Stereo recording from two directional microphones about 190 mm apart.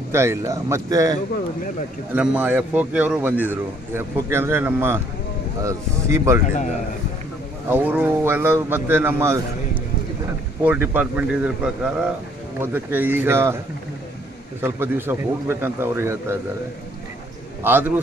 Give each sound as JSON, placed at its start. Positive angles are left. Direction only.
{"t": 0.1, "sound": "a man's voice", "side_deg": -15}
{"t": 6.4, "sound": "a man's voice", "side_deg": 40}
{"t": 7.7, "sound": "a man's voice", "side_deg": -10}
{"t": 10.6, "sound": "a man's voice", "side_deg": -10}
{"t": 14.6, "sound": "a man's voice", "side_deg": -10}
{"t": 17.6, "sound": "a man's voice", "side_deg": -10}